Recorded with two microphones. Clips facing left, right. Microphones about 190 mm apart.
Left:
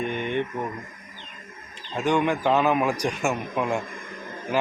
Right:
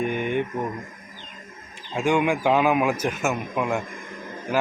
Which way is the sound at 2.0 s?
10° right (ahead or behind).